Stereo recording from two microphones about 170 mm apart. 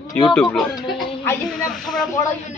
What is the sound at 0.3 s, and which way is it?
Speech, 5° left (ahead or behind).